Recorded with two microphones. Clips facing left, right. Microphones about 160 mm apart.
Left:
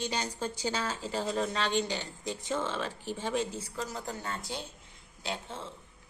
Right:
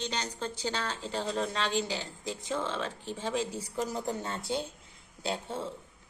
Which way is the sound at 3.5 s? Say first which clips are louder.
Right 4 dB; 15° right (ahead or behind).